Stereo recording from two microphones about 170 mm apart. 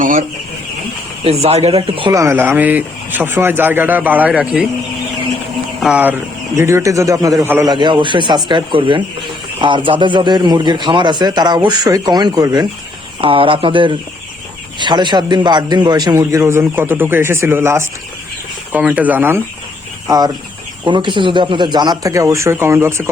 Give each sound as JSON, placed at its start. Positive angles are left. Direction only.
{"t": 0.0, "sound": "speech", "side_deg": -50}
{"t": 1.2, "sound": "speech", "side_deg": -35}
{"t": 5.8, "sound": "a man's voice", "side_deg": -5}
{"t": 7.7, "sound": "a man's voice", "side_deg": -25}
{"t": 20.1, "sound": "a man's voice", "side_deg": -25}